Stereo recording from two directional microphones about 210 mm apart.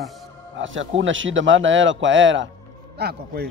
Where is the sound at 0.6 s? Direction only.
65° right (ahead or behind).